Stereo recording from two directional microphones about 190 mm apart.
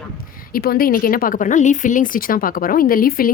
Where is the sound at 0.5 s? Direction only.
50° left (ahead or behind).